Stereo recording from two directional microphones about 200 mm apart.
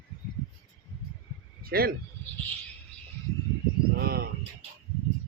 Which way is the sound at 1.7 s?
50° right (ahead or behind).